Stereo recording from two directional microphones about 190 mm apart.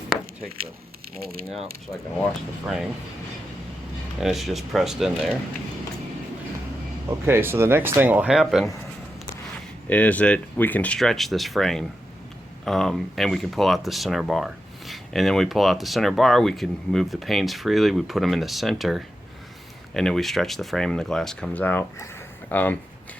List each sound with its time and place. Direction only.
1.2 s speech: 50° right (ahead or behind)
2.6 s speech: centre (ahead or behind)
4.2 s speech: centre (ahead or behind)
7.3 s speech: 10° right (ahead or behind)
9.9 s speech: 5° left (ahead or behind)